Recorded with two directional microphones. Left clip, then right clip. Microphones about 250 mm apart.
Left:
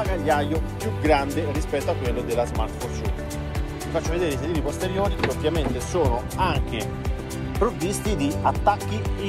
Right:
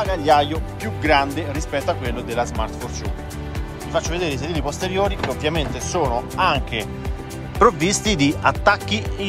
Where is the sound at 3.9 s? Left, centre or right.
Centre.